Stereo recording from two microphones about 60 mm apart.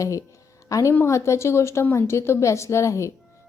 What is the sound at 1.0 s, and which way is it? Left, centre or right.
A woman's voice, left.